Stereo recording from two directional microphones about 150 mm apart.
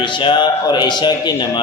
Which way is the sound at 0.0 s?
35° left (ahead or behind).